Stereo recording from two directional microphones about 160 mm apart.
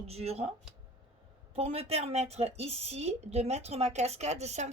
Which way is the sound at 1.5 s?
40° right (ahead or behind).